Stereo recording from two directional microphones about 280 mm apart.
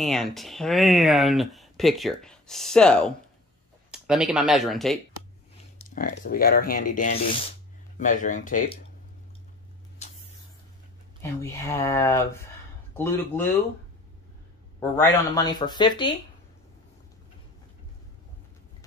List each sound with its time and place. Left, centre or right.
0.0 s speech: centre
5.9 s speech: left
10.0 s spray: left
11.2 s speech: centre
14.8 s speech: centre